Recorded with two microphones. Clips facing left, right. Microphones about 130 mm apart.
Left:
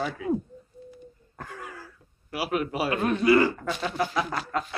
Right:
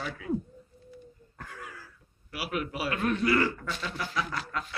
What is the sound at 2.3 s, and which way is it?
Speech, 30° left (ahead or behind).